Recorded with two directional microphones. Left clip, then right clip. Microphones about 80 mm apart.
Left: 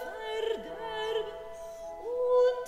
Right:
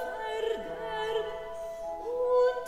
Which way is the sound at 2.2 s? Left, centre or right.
Left.